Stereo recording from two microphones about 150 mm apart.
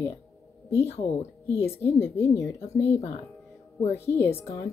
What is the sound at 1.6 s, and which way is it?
Speech, 15° left (ahead or behind).